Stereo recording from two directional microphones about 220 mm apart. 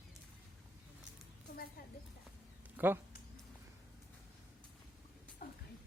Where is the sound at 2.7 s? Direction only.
10° right (ahead or behind).